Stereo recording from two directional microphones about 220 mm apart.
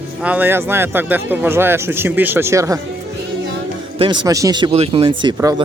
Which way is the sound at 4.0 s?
20° right (ahead or behind).